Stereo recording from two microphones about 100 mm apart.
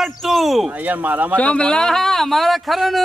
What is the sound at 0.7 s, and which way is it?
Speech, 15° right (ahead or behind).